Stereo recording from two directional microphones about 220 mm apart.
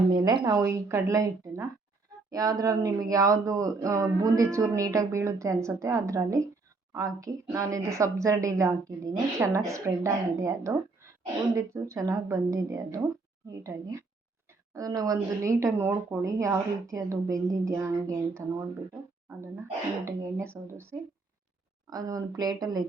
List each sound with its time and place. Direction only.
0.1 s speech: 20° right (ahead or behind)
20.1 s speech: 10° right (ahead or behind)